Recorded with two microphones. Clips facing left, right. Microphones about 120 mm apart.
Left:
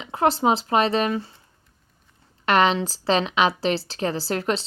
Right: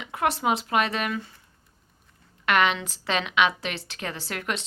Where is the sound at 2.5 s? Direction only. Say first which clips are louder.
Left 4 dB; 35° left (ahead or behind).